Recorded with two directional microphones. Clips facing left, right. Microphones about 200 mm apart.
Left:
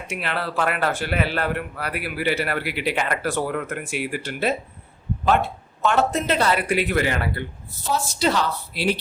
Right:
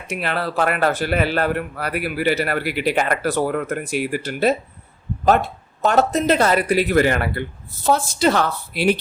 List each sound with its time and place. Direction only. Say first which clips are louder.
0.1 s a man's voice: right 4 dB; 40° right (ahead or behind)